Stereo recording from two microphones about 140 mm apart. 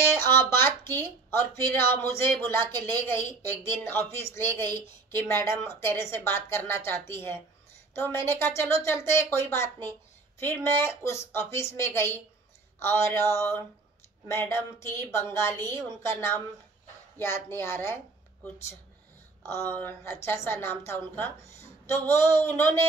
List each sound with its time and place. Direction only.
0.1 s a woman's voice: 15° left (ahead or behind)